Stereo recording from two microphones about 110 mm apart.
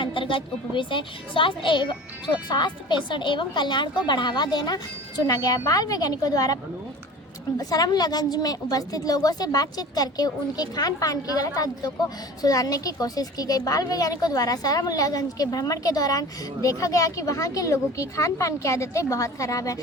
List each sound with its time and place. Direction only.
0.0 s a woman's voice: 50° left (ahead or behind); by 6.6 s 35° left (ahead or behind)
7.6 s a woman's voice: 35° left (ahead or behind)